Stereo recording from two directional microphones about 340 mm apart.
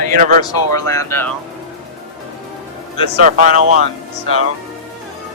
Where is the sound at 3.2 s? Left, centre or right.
Right.